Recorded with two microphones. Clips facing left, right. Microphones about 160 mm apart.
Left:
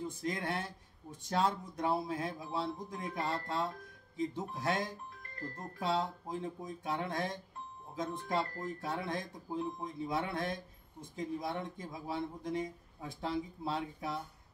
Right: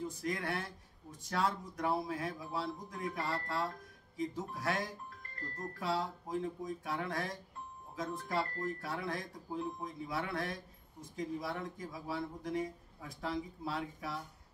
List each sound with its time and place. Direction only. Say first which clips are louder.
0.2 s speech: left 2 dB; 25° left (ahead or behind)